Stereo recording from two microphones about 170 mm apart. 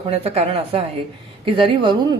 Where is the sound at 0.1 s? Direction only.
35° right (ahead or behind).